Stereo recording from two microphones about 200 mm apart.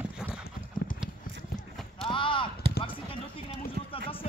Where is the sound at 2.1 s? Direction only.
25° left (ahead or behind).